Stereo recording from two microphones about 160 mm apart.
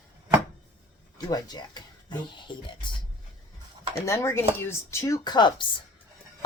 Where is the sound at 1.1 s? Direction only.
25° left (ahead or behind).